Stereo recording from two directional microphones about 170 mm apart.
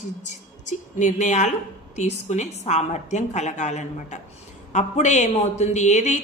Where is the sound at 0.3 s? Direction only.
45° left (ahead or behind).